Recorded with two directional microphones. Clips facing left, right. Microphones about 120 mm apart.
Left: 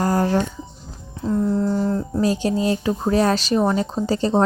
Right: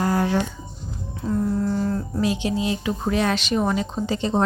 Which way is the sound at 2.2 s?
40° left (ahead or behind).